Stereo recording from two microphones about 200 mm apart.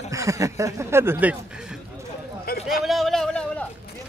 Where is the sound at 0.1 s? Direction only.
15° right (ahead or behind).